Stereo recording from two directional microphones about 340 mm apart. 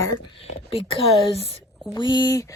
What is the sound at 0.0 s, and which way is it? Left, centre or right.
Speech, centre.